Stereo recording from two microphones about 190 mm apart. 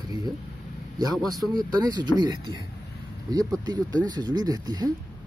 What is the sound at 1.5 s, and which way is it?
Speech, 20° right (ahead or behind).